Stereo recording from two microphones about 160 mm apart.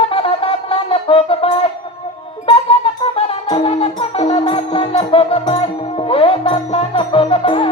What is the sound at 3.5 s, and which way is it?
Music, 35° left (ahead or behind).